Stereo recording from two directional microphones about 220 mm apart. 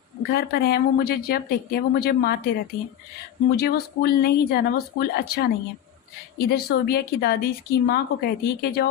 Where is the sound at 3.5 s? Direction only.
45° left (ahead or behind).